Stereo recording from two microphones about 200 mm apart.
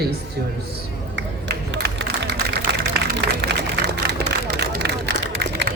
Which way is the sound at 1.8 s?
55° right (ahead or behind).